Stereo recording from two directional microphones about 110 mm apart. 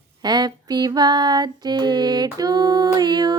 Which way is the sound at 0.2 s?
40° right (ahead or behind).